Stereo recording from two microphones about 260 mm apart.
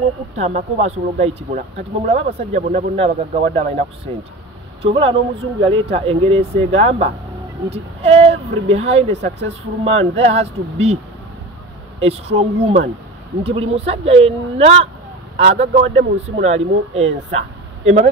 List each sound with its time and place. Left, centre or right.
0.4 s speech: right
4.8 s speech: right
12.0 s speech: right